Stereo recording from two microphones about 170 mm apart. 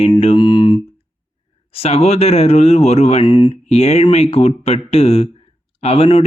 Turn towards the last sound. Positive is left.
turn(degrees=35)  # may be behind; listen again after turning